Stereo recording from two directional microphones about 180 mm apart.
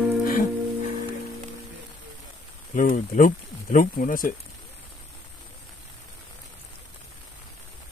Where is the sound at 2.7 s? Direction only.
50° left (ahead or behind).